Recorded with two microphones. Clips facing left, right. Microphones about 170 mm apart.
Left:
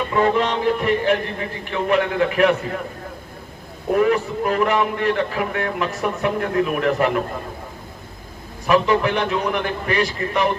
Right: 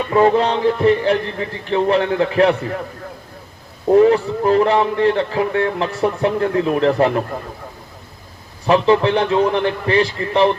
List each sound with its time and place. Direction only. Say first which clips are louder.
0.1 s a man's voice: right 6 dB; 35° right (ahead or behind)
3.9 s a man's voice: right 6 dB; 30° right (ahead or behind)
8.6 s a man's voice: right 3 dB; 30° right (ahead or behind)